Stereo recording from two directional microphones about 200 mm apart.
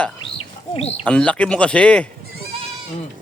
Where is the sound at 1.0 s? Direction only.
5° left (ahead or behind).